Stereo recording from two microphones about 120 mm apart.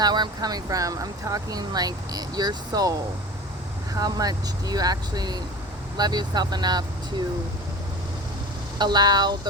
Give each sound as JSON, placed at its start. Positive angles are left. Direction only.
{"t": 0.0, "sound": "speech", "side_deg": -35}
{"t": 8.8, "sound": "speech", "side_deg": -35}